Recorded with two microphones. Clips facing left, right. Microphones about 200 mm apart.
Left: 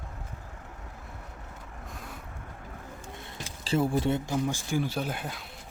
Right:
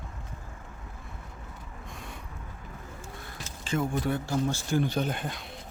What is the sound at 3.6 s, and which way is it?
Speech, 35° left (ahead or behind).